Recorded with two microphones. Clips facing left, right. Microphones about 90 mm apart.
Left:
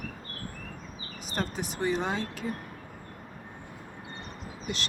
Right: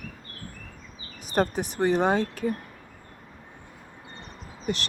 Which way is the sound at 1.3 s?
50° right (ahead or behind).